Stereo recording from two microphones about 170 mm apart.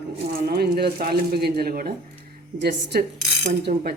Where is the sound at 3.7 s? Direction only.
50° right (ahead or behind).